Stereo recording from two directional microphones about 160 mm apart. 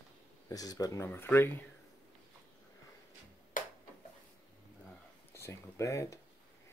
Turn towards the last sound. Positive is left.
turn(degrees=20)  # may be behind; listen again after turning